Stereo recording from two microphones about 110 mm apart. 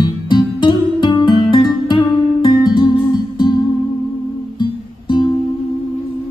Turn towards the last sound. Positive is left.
turn(degrees=45)  # may be behind; listen again after turning